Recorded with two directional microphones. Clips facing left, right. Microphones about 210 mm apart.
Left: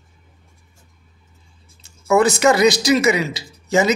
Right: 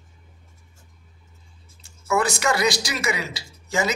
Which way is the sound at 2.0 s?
25° left (ahead or behind).